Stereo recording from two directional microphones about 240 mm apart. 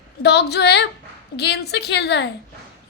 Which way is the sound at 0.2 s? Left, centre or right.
Left.